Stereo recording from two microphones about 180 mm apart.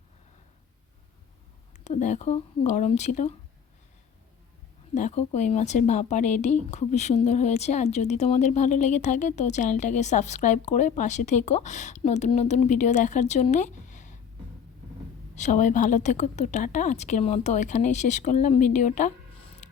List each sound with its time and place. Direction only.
1.8 s speech: 40° left (ahead or behind)
4.9 s speech: 40° left (ahead or behind)
15.4 s speech: 45° left (ahead or behind)